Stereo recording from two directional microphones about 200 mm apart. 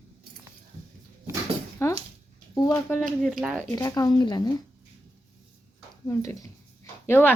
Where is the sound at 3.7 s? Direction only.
15° left (ahead or behind).